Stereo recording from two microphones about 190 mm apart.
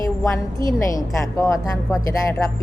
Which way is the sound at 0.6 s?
15° left (ahead or behind).